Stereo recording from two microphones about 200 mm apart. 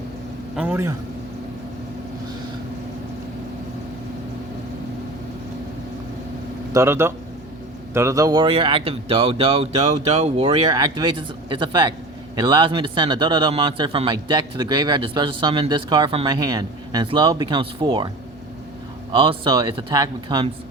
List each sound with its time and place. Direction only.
0.5 s a man's voice: 10° right (ahead or behind)
6.7 s a man's voice: 10° right (ahead or behind)
19.1 s a man's voice: 25° right (ahead or behind)